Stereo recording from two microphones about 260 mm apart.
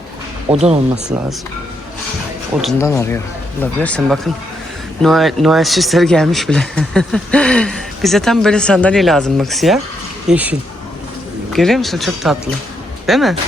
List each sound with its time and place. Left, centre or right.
0.5 s speech: right
2.6 s speech: centre
2.8 s speech: centre